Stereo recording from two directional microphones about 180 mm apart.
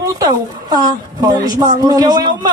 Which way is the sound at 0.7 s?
20° right (ahead or behind).